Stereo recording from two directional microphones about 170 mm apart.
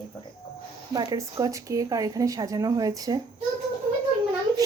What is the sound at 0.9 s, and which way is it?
Speech, 20° right (ahead or behind).